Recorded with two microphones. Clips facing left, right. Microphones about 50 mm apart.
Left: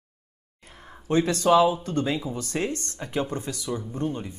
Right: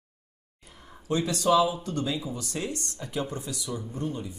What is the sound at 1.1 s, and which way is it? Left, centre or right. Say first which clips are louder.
Speech: left 4 dB; left.